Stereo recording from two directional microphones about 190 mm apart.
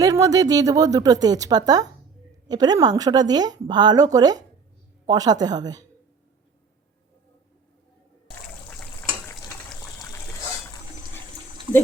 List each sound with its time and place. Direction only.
0.0 s speech: 20° right (ahead or behind)
8.8 s a sound: 10° left (ahead or behind)
9.8 s water: 15° left (ahead or behind)